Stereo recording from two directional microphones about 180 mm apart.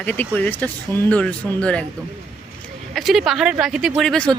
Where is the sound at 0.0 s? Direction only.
10° left (ahead or behind).